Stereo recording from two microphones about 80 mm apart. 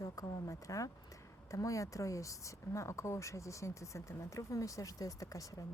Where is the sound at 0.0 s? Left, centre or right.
Left.